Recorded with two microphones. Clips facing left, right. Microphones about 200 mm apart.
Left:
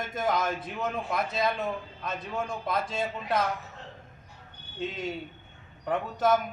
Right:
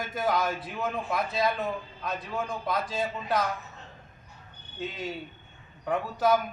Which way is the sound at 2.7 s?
25° left (ahead or behind).